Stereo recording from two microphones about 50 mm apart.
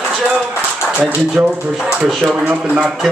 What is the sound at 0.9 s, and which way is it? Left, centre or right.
Speech, right.